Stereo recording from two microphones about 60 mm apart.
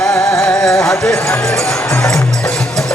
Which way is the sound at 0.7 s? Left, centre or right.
Left.